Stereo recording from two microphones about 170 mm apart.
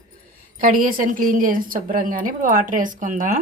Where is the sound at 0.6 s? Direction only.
55° right (ahead or behind).